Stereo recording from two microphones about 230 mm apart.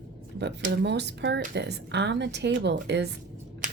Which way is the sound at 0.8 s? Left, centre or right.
Right.